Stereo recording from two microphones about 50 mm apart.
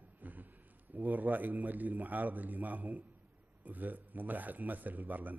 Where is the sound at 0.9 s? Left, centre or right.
Right.